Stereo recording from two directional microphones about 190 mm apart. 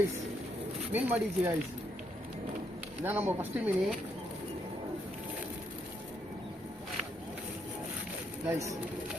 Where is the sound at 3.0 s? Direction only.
10° right (ahead or behind).